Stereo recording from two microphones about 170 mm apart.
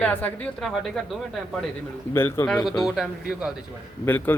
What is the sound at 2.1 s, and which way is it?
Speech, 15° left (ahead or behind).